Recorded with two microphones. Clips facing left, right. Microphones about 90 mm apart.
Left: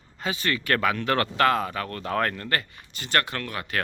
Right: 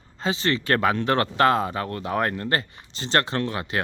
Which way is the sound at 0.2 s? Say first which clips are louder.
Right 4 dB; 25° right (ahead or behind).